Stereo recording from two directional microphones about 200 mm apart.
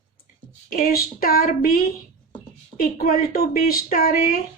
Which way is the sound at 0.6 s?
45° left (ahead or behind).